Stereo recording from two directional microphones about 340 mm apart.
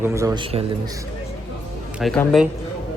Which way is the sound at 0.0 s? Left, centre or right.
Centre.